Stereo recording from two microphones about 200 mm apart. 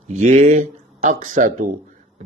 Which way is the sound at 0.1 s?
35° right (ahead or behind).